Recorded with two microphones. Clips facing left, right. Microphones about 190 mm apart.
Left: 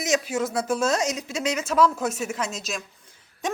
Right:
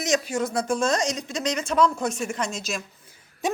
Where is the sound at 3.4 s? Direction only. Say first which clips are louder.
Right 2 dB; 10° right (ahead or behind).